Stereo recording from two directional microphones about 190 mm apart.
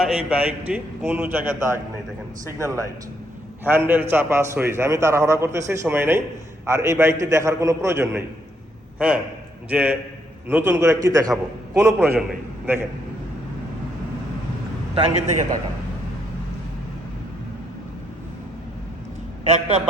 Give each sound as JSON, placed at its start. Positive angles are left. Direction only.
{"t": 0.0, "sound": "a man's voice", "side_deg": -5}
{"t": 19.5, "sound": "a man's voice", "side_deg": -35}